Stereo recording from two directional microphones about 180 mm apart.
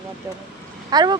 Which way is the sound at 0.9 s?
25° right (ahead or behind).